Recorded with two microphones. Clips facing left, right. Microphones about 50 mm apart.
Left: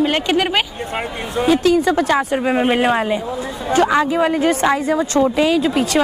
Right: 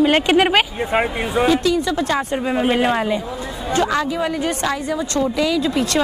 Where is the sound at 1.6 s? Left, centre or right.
Left.